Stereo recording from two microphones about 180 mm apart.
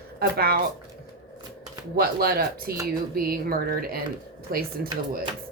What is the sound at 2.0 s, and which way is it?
Speech, 55° right (ahead or behind).